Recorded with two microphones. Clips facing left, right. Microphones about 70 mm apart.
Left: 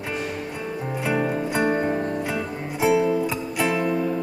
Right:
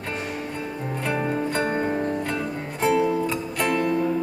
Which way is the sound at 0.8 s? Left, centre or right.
Centre.